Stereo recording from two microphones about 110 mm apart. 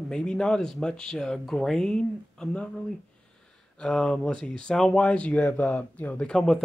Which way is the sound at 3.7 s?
10° left (ahead or behind).